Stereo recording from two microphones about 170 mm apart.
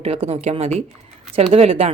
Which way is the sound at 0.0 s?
35° right (ahead or behind).